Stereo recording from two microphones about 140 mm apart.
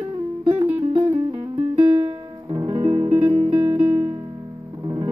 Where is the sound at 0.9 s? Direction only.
35° right (ahead or behind).